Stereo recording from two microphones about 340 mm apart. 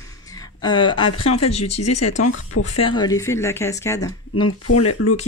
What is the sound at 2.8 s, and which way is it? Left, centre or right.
A man's voice, centre.